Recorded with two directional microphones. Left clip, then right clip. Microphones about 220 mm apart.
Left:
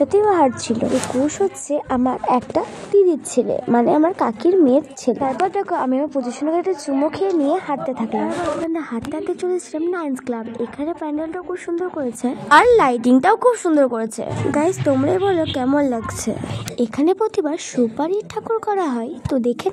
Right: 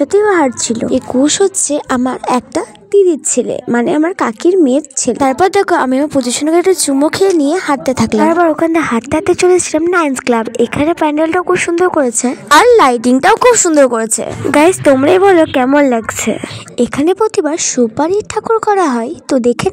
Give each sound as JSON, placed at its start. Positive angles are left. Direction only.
{"t": 0.0, "sound": "a woman's voice", "side_deg": -35}
{"t": 1.2, "sound": "a woman's voice", "side_deg": -55}
{"t": 5.2, "sound": "a woman's voice", "side_deg": -50}